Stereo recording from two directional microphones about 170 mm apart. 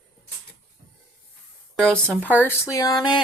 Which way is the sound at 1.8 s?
5° left (ahead or behind).